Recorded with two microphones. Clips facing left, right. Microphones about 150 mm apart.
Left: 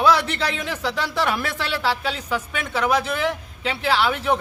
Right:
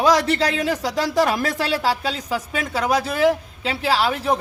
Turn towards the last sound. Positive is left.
turn(degrees=-35)  # may be behind; listen again after turning